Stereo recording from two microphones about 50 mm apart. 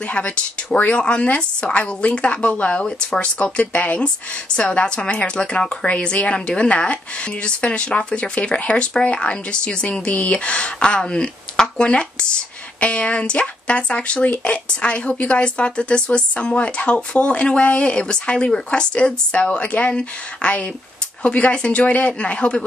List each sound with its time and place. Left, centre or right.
0.7 s a woman's voice: left